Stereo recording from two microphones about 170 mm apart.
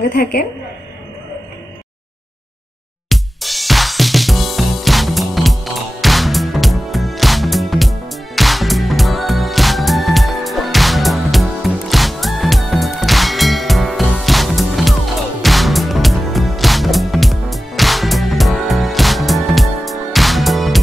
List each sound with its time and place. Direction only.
0.1 s a woman's voice: 60° left (ahead or behind)
3.1 s music: centre (ahead or behind)